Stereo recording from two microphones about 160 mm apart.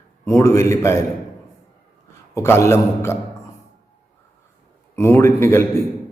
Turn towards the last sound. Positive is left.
turn(degrees=15)  # may be behind; listen again after turning